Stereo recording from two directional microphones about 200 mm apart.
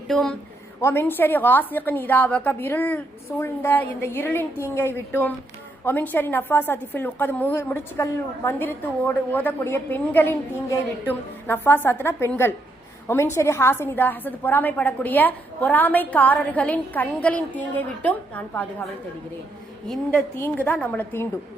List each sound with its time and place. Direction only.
0.1 s a woman's voice: centre (ahead or behind)
19.9 s a woman's voice: 10° left (ahead or behind)